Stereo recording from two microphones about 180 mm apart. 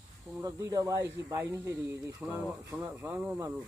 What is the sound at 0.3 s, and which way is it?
Speech, 20° right (ahead or behind).